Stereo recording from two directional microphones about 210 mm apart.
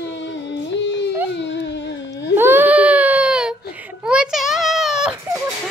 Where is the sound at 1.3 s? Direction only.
55° left (ahead or behind).